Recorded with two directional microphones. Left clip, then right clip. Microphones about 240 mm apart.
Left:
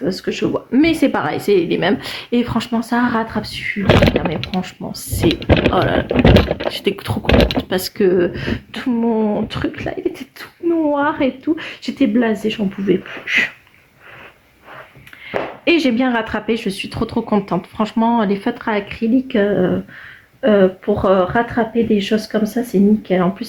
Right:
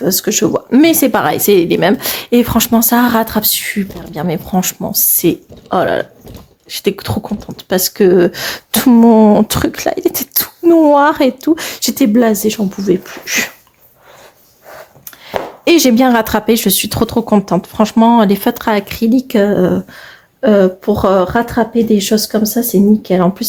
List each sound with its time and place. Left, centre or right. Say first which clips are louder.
0.0 s speech: right 6 dB; right
5.7 s speech: right 2 dB; right
15.6 s speech: right 7 dB; right